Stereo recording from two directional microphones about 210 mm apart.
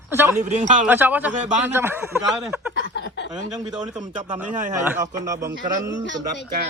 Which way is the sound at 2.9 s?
55° left (ahead or behind).